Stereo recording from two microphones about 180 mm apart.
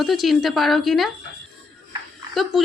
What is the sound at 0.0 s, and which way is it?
A woman's voice, centre (ahead or behind).